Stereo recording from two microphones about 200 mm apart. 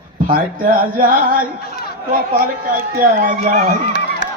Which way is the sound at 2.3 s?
45° right (ahead or behind).